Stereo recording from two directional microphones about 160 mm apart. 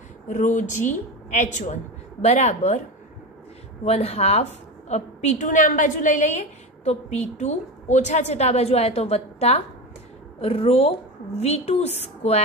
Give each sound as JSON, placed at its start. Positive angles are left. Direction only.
{"t": 0.3, "sound": "a woman's voice", "side_deg": 50}
{"t": 3.8, "sound": "a woman's voice", "side_deg": 40}